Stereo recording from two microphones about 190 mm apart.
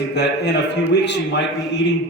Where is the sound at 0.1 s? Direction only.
60° left (ahead or behind).